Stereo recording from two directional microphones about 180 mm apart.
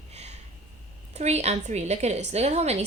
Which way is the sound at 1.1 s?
35° right (ahead or behind).